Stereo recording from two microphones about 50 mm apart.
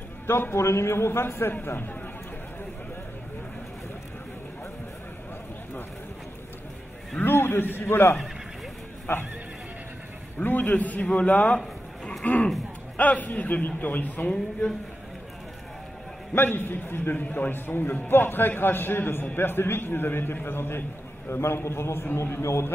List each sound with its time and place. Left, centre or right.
0.3 s a man's voice: left
7.2 s a man's voice: left
10.4 s a man's voice: left
16.3 s a man's voice: left
17.1 s a man's voice: left
21.3 s a man's voice: left